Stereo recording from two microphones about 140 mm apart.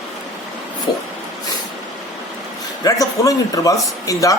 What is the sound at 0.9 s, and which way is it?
Speech, 30° left (ahead or behind).